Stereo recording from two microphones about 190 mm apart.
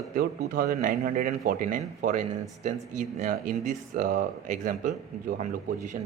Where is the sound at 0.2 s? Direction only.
50° right (ahead or behind).